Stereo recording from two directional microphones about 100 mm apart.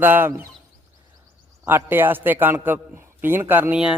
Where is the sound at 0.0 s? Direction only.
20° right (ahead or behind).